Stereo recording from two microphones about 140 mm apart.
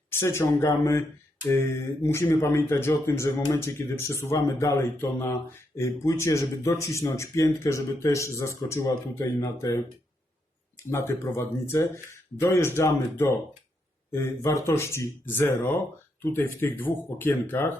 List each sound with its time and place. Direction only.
0.1 s speech: 20° left (ahead or behind)